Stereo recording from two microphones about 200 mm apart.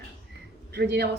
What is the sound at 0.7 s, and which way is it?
Speech, 55° right (ahead or behind).